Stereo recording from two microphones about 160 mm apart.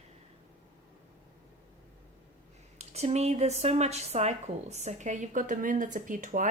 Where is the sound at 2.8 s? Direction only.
45° right (ahead or behind).